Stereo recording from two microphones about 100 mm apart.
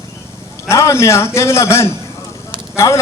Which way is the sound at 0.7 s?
30° left (ahead or behind).